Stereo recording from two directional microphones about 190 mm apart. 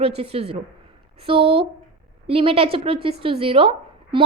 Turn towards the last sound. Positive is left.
turn(degrees=-30)  # may be behind; listen again after turning